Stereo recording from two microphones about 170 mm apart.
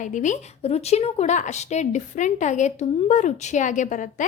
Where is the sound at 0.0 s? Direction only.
45° left (ahead or behind).